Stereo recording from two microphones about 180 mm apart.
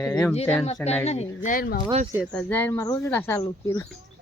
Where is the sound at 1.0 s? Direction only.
35° left (ahead or behind).